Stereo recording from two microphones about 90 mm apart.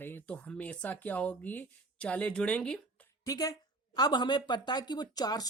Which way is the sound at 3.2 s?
45° left (ahead or behind).